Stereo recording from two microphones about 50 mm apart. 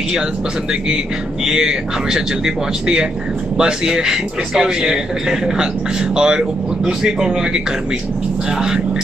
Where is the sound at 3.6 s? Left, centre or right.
Centre.